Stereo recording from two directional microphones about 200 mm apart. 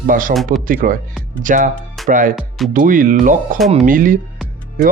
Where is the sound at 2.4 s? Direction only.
Centre (ahead or behind).